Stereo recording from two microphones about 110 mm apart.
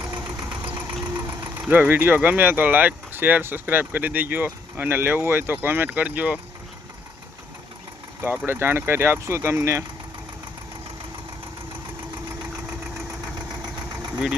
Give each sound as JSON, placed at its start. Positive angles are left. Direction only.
{"t": 0.6, "sound": "vehicle", "side_deg": -20}
{"t": 1.0, "sound": "engine", "side_deg": -20}
{"t": 1.6, "sound": "speech", "side_deg": -15}
{"t": 8.4, "sound": "speech", "side_deg": -20}